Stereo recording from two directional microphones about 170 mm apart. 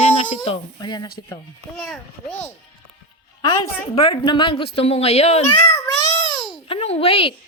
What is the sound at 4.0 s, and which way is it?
A woman's voice, 30° left (ahead or behind).